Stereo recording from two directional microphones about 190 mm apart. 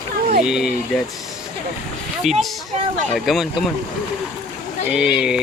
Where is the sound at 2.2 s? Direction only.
Centre (ahead or behind).